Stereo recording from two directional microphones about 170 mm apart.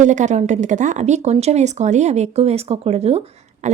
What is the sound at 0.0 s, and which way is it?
Speech, 45° right (ahead or behind).